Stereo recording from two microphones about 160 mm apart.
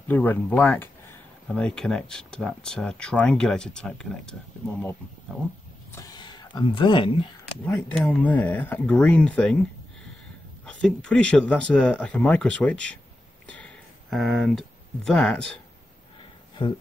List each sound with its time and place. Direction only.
0.1 s speech: 10° left (ahead or behind)
5.9 s speech: 20° left (ahead or behind)
7.9 s speech: 10° left (ahead or behind)